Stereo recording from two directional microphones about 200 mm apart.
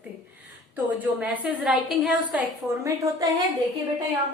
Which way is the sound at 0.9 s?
10° right (ahead or behind).